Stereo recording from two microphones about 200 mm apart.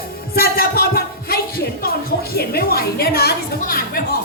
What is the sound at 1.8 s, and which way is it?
A woman's voice, 50° left (ahead or behind).